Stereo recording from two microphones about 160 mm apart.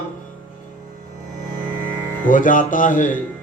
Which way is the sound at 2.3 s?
55° left (ahead or behind).